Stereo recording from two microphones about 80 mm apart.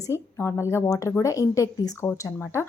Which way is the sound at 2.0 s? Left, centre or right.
Left.